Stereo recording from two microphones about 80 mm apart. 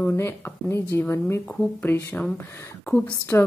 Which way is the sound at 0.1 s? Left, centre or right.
Left.